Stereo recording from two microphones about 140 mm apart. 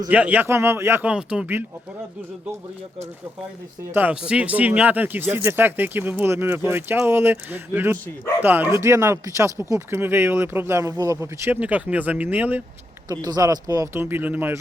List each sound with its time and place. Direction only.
0.1 s speech: 10° right (ahead or behind)
3.9 s speech: 10° right (ahead or behind)
13.1 s speech: 25° right (ahead or behind)